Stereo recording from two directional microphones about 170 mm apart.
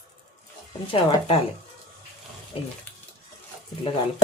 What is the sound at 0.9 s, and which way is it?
Speech, 35° left (ahead or behind).